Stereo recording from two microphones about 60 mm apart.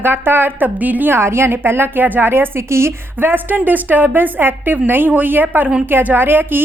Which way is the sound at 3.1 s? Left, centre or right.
Right.